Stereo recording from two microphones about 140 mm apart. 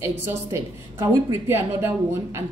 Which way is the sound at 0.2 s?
15° right (ahead or behind).